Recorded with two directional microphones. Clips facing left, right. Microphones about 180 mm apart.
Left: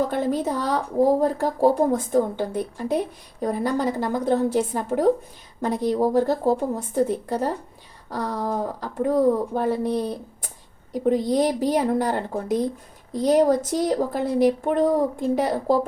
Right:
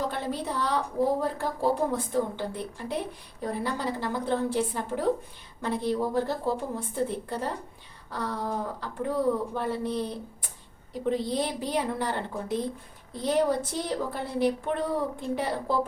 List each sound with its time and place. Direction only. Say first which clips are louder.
0.1 s speech: left 8 dB; 45° left (ahead or behind)